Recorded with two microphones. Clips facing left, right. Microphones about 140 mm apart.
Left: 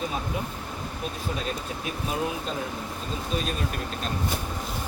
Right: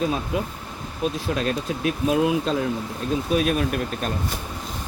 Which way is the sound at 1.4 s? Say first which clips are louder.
Right 7 dB; 90° right.